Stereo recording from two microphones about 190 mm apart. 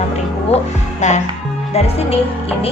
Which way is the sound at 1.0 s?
40° left (ahead or behind).